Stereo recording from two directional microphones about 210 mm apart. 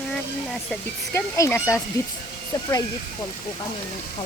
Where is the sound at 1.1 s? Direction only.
15° left (ahead or behind).